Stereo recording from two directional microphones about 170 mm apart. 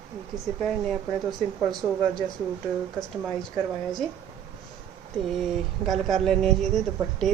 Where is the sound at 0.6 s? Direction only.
5° left (ahead or behind).